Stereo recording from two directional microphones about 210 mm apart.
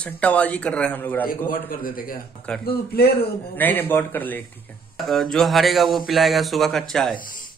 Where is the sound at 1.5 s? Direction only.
40° left (ahead or behind).